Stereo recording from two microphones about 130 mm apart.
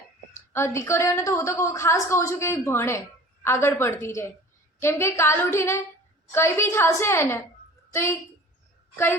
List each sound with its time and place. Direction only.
0.5 s a woman's voice: 20° left (ahead or behind)